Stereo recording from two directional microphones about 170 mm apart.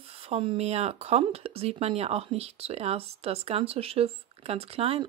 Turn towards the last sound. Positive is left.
turn(degrees=-35)  # may be behind; listen again after turning